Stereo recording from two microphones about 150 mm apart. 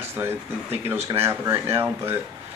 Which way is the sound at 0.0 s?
15° right (ahead or behind).